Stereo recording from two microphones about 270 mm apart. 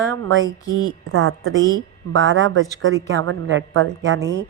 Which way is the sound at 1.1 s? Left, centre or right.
Right.